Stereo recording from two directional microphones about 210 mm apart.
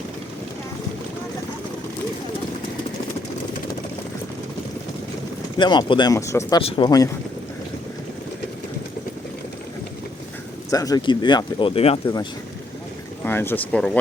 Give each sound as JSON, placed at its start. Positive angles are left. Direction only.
{"t": 5.5, "sound": "speech", "side_deg": 20}
{"t": 6.6, "sound": "speech", "side_deg": 25}
{"t": 10.7, "sound": "speech", "side_deg": 15}
{"t": 13.2, "sound": "speech", "side_deg": 10}